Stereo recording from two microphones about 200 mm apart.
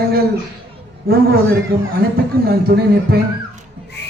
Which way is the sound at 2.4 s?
50° right (ahead or behind).